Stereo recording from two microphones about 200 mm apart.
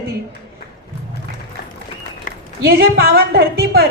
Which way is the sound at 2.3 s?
40° left (ahead or behind).